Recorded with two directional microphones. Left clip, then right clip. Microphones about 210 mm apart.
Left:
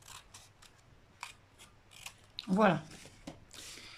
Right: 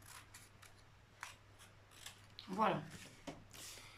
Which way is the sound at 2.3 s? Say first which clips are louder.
Left 8 dB; 50° left (ahead or behind).